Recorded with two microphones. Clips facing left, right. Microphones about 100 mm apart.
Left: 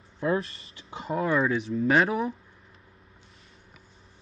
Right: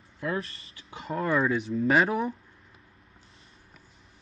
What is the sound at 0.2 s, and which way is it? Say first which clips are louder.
Speech: left 5 dB; 30° left (ahead or behind).